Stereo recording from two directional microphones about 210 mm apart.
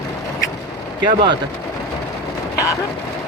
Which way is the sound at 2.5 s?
15° left (ahead or behind).